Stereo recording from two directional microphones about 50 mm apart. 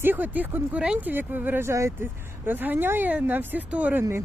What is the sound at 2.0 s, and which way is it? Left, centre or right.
Speech, right.